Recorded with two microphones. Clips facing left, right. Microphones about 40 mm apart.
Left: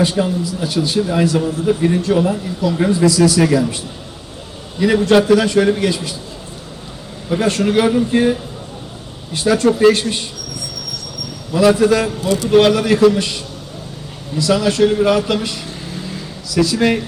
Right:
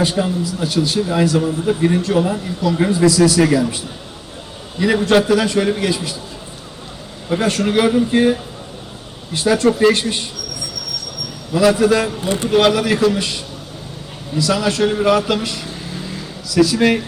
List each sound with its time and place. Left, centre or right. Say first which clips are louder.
0.0 s a man's voice: left 1 dB; centre
4.8 s a man's voice: left 2 dB; centre
7.3 s a man's voice: left 1 dB; centre
11.5 s a man's voice: left 1 dB; centre
12.2 s speech: left 2 dB; right
12.5 s a man's voice: left 2 dB; centre